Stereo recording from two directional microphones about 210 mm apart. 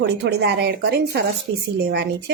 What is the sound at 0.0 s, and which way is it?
A woman's voice, 55° right (ahead or behind).